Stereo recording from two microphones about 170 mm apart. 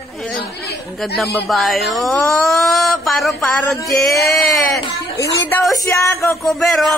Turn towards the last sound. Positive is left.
turn(degrees=0)  # may be behind; listen again after turning